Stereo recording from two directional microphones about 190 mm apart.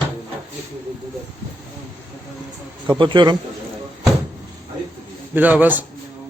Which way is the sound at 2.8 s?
25° right (ahead or behind).